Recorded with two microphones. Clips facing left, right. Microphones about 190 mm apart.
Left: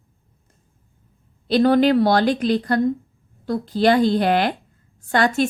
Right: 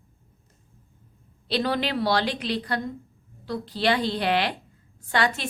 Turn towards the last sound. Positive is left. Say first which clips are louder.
# left 7 dB
turn(degrees=45)  # may be behind; listen again after turning